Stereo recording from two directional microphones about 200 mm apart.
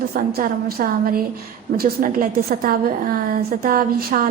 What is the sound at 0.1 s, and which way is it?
A woman's voice, 45° right (ahead or behind).